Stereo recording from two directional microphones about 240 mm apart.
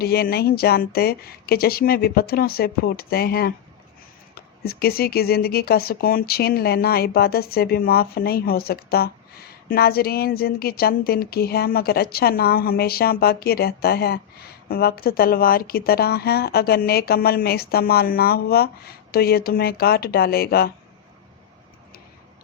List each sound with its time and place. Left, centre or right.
0.0 s speech: left